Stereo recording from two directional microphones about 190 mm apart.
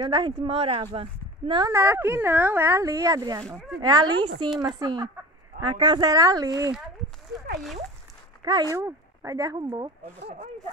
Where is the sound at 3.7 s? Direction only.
20° right (ahead or behind).